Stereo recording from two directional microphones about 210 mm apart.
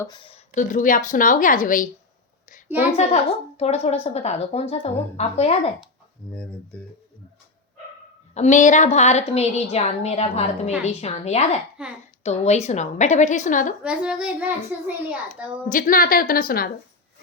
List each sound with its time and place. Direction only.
0.0 s a woman's voice: 25° left (ahead or behind)
0.5 s a woman's voice: 35° left (ahead or behind)
2.9 s a woman's voice: 30° left (ahead or behind)
6.7 s speech: 5° left (ahead or behind)
8.4 s a woman's voice: 35° left (ahead or behind)
11.8 s a child's voice: 5° right (ahead or behind)
12.2 s a woman's voice: 30° left (ahead or behind)
13.8 s a child's voice: 5° right (ahead or behind)
15.7 s a woman's voice: 40° left (ahead or behind)